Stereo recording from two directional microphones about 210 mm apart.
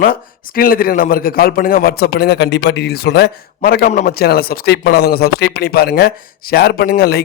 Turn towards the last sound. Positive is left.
turn(degrees=45)  # may be behind; listen again after turning